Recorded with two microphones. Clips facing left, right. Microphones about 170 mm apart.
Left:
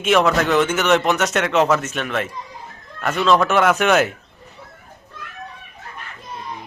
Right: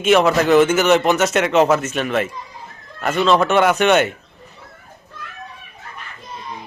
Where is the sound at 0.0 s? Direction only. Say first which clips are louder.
Right 2 dB; centre (ahead or behind).